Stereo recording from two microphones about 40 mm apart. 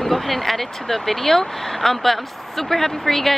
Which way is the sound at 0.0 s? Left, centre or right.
Centre.